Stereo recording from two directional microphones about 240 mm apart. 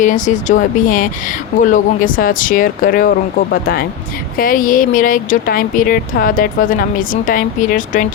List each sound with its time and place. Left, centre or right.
0.0 s speech: left